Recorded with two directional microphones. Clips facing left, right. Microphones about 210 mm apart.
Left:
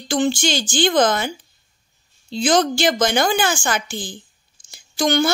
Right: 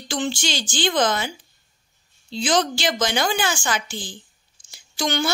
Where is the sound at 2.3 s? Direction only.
50° left (ahead or behind).